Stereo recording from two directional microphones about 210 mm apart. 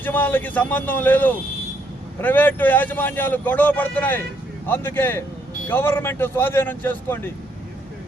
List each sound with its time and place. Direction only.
0.0 s a man's voice: 10° left (ahead or behind)